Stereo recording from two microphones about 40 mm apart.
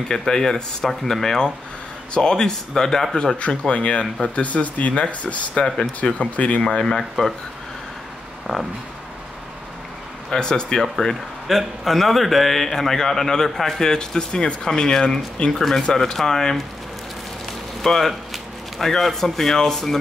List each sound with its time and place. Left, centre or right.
0.1 s a man's voice: centre
3.3 s speech: left
6.8 s a man's voice: centre
8.5 s speech: centre
10.3 s a man's voice: centre
11.4 s a man's voice: centre
17.8 s a man's voice: centre